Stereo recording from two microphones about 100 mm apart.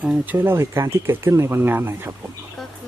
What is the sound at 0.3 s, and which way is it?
Speech, 25° right (ahead or behind).